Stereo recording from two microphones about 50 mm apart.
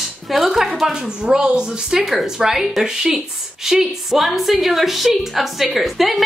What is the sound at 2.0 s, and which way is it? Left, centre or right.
A woman's voice, centre.